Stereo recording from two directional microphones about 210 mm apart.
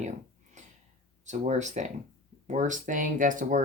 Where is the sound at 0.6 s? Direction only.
35° right (ahead or behind).